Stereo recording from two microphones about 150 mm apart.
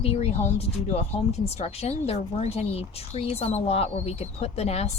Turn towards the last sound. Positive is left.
turn(degrees=45)  # may be behind; listen again after turning